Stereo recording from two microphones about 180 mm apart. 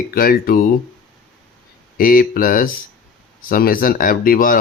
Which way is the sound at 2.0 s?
50° left (ahead or behind).